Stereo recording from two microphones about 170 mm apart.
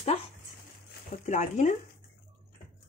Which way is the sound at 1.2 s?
45° left (ahead or behind).